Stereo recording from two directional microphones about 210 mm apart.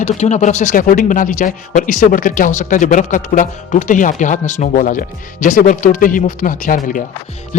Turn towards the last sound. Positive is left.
turn(degrees=35)  # may be behind; listen again after turning